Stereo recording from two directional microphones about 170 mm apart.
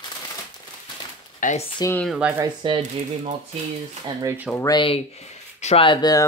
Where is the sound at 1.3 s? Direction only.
50° left (ahead or behind).